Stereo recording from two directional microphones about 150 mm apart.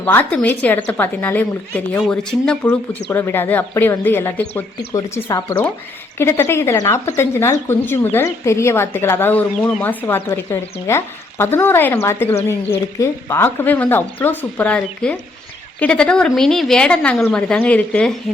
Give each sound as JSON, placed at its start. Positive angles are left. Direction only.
{"t": 0.0, "sound": "a woman's voice", "side_deg": 10}
{"t": 2.6, "sound": "a woman's voice", "side_deg": 15}